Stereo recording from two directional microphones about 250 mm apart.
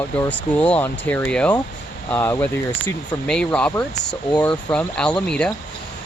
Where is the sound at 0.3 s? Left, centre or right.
Centre.